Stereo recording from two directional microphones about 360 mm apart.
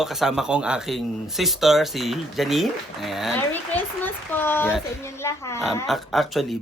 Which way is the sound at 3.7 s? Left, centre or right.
Centre.